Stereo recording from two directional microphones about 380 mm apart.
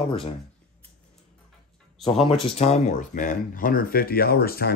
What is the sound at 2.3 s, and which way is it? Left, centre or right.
Speech, centre.